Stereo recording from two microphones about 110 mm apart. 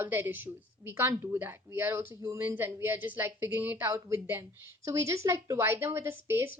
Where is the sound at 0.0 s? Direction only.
20° right (ahead or behind).